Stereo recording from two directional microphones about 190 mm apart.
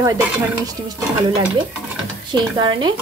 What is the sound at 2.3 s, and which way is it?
Speech, 25° right (ahead or behind).